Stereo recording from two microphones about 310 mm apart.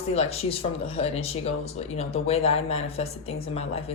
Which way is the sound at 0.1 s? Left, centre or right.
Centre.